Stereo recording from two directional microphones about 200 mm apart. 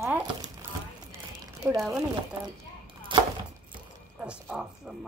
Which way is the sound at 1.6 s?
15° right (ahead or behind).